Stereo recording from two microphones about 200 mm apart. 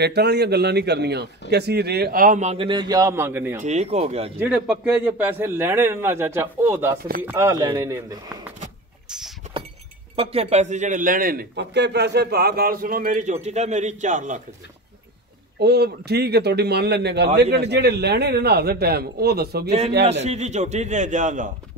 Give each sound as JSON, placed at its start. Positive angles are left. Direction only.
{"t": 0.0, "sound": "a man's voice", "side_deg": -55}
{"t": 3.6, "sound": "a man's voice", "side_deg": -35}
{"t": 4.4, "sound": "a man's voice", "side_deg": -5}
{"t": 10.1, "sound": "a man's voice", "side_deg": -30}
{"t": 15.6, "sound": "a man's voice", "side_deg": -55}
{"t": 20.2, "sound": "a man's voice", "side_deg": -35}